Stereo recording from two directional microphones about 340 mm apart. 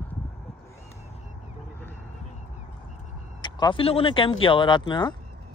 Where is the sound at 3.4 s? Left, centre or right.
Centre.